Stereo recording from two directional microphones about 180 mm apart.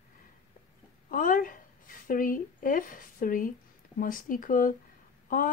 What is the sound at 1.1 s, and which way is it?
A woman's voice, 50° left (ahead or behind).